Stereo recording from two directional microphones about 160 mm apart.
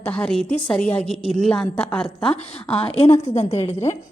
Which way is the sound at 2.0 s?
40° left (ahead or behind).